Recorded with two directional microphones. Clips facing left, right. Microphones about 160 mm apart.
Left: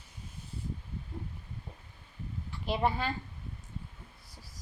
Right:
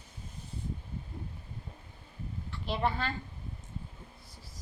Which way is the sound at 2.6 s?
10° left (ahead or behind).